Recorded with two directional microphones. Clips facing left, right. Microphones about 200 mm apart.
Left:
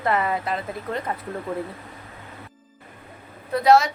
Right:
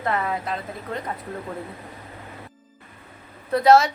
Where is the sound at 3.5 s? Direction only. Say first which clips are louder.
Right 1 dB; centre (ahead or behind).